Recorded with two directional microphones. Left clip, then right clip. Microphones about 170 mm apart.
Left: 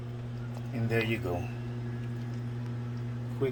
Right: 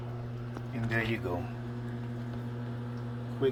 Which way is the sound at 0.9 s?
35° left (ahead or behind).